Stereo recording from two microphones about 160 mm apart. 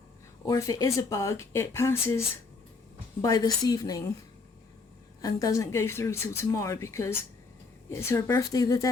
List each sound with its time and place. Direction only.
0.4 s speech: 20° left (ahead or behind)
5.2 s speech: 20° left (ahead or behind)